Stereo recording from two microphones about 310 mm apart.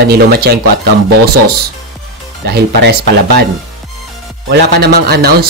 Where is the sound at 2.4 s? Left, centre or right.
Right.